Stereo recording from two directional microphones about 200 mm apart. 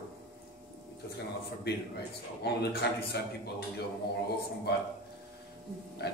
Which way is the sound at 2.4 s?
55° left (ahead or behind).